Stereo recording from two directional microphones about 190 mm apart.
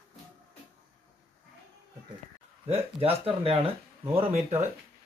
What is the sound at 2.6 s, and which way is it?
Speech, 30° right (ahead or behind).